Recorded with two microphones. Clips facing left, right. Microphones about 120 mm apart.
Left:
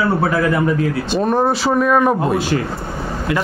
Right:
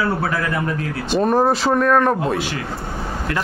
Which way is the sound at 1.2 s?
Centre (ahead or behind).